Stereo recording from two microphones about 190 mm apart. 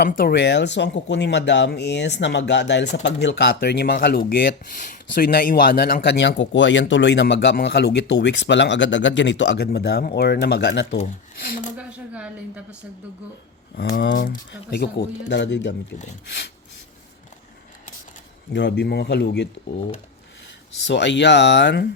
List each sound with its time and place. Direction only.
0.0 s speech: 55° left (ahead or behind)
11.8 s a sound: 5° right (ahead or behind)
13.9 s speech: 70° left (ahead or behind)
14.3 s speech: 55° left (ahead or behind)
15.3 s speech: 70° left (ahead or behind)
18.5 s speech: 65° left (ahead or behind)
20.8 s speech: 65° left (ahead or behind)